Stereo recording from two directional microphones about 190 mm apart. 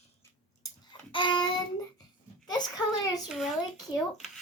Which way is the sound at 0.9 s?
25° left (ahead or behind).